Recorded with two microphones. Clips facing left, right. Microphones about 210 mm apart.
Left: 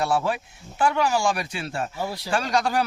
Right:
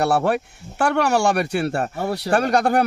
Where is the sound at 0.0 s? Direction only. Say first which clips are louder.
Right 5 dB; 65° right (ahead or behind).